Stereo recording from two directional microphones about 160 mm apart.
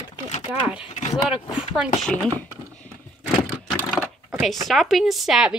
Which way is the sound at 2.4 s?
10° left (ahead or behind).